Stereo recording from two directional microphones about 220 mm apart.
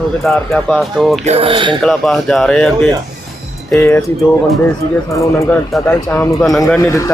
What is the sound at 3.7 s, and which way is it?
Speech, 5° left (ahead or behind).